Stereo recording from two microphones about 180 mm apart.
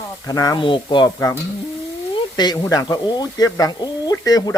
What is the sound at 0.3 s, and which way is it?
Speech, 20° left (ahead or behind).